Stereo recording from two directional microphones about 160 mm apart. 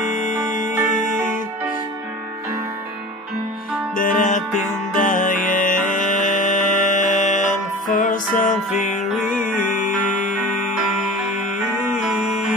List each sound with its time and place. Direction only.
0.1 s music: 50° left (ahead or behind)
3.9 s music: 55° left (ahead or behind)
9.1 s music: centre (ahead or behind)
11.1 s music: centre (ahead or behind)